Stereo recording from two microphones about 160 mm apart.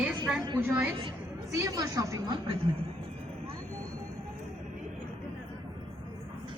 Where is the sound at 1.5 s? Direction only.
20° right (ahead or behind).